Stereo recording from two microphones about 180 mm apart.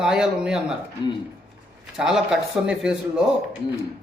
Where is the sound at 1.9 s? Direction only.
5° right (ahead or behind).